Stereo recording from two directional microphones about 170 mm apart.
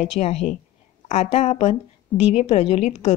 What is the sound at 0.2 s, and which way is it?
A woman's voice, 40° left (ahead or behind).